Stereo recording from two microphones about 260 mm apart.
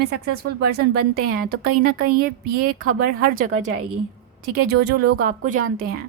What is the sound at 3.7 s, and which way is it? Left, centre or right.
Speech, right.